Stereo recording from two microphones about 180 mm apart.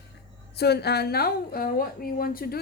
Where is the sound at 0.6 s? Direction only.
65° left (ahead or behind).